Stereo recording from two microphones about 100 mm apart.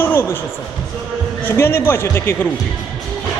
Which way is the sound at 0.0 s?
25° left (ahead or behind).